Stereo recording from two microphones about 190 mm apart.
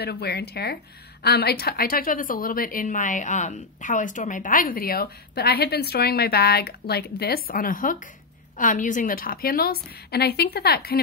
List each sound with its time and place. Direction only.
0.0 s a woman's voice: 60° left (ahead or behind)